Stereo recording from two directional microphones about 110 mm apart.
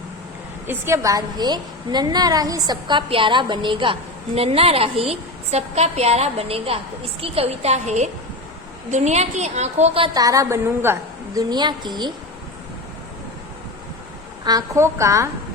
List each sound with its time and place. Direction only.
0.7 s a woman's voice: 25° right (ahead or behind); by 3.9 s 50° right (ahead or behind)
4.4 s a woman's voice: 65° right (ahead or behind); by 10.0 s 90° right
10.2 s a woman's voice: 30° right (ahead or behind)
11.3 s a woman's voice: 40° right (ahead or behind)
14.4 s a woman's voice: 35° right (ahead or behind)